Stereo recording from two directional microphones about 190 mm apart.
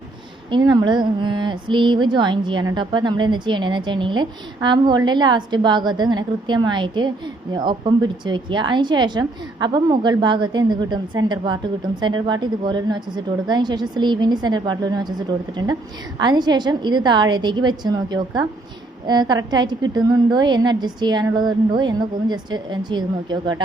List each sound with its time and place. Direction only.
0.5 s a woman's voice: 25° right (ahead or behind)
16.1 s a woman's voice: 20° right (ahead or behind)